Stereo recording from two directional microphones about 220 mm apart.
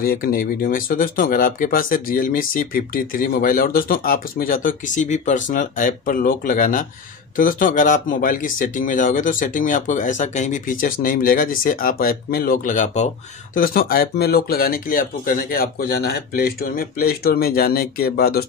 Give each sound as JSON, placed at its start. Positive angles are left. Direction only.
{"t": 0.0, "sound": "speech", "side_deg": 40}